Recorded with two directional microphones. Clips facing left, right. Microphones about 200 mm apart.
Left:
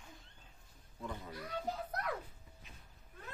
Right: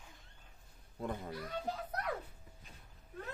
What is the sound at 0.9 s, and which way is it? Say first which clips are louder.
Speech: right 5 dB; 55° right (ahead or behind).